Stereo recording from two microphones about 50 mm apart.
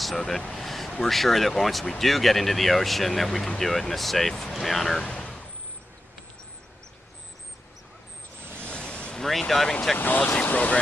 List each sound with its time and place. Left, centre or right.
0.5 s a sound: centre
1.0 s speech: centre
5.1 s a sound: left
8.5 s vehicle: left
9.2 s speech: centre
9.9 s speech: left